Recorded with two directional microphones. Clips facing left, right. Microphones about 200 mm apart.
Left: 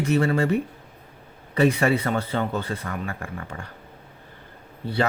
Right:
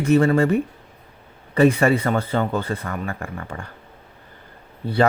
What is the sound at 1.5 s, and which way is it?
Speech, 50° right (ahead or behind).